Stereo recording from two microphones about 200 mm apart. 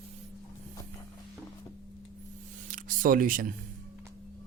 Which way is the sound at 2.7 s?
40° right (ahead or behind).